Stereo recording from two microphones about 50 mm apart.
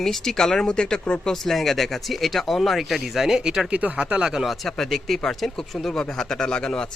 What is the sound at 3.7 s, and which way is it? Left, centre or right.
Speech, right.